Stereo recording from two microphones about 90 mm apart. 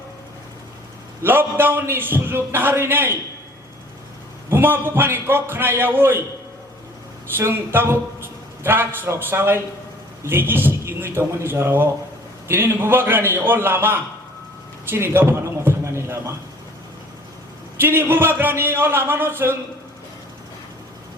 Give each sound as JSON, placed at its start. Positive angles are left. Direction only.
{"t": 1.2, "sound": "a man's voice", "side_deg": -25}
{"t": 4.4, "sound": "a man's voice", "side_deg": -25}
{"t": 7.3, "sound": "a man's voice", "side_deg": -25}
{"t": 14.8, "sound": "a sound", "side_deg": -25}
{"t": 17.7, "sound": "a man's voice", "side_deg": -25}